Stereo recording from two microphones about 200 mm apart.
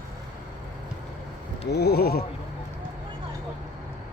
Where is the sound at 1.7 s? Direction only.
55° left (ahead or behind).